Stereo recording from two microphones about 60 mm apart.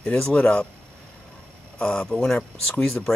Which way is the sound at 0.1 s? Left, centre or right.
Centre.